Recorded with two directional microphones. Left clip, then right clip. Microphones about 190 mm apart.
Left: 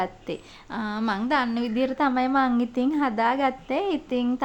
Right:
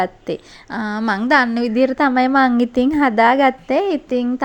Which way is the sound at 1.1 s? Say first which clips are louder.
Right 10 dB; 30° right (ahead or behind).